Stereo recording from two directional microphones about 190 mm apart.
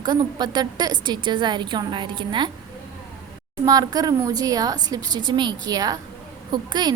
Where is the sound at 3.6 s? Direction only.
20° right (ahead or behind).